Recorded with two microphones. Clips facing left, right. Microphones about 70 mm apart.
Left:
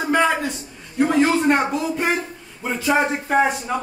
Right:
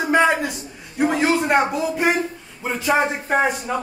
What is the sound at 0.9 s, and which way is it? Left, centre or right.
Speech, centre.